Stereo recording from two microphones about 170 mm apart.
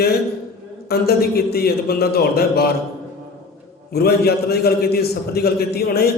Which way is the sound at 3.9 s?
65° left (ahead or behind).